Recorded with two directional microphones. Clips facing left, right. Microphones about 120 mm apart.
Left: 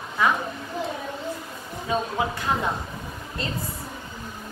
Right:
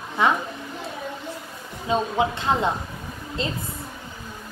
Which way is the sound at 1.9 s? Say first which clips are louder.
Right 3 dB; 25° right (ahead or behind).